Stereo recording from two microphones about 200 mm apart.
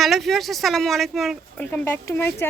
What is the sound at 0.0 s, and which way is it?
Speech, centre (ahead or behind).